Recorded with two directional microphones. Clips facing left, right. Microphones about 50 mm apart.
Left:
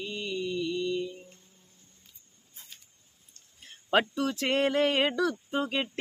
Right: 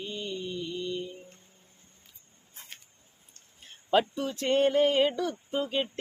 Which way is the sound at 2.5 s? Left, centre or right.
Right.